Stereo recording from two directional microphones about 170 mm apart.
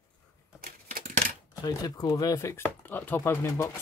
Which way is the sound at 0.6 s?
55° right (ahead or behind).